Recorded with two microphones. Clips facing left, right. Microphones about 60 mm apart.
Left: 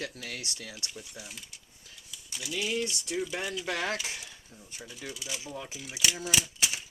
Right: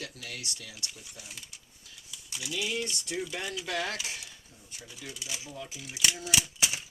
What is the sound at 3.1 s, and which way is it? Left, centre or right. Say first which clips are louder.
Speech: left 2 dB; centre.